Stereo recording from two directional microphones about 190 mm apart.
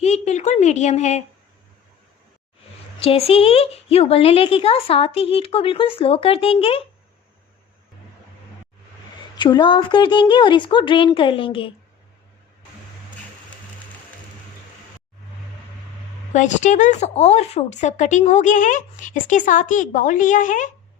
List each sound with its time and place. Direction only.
0.0 s speech: 35° left (ahead or behind)
3.0 s speech: 30° left (ahead or behind)
9.4 s a woman's voice: 25° left (ahead or behind)
16.3 s speech: 40° left (ahead or behind)